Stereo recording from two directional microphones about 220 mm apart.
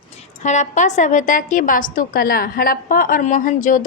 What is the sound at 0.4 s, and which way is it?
A woman's voice, 35° left (ahead or behind).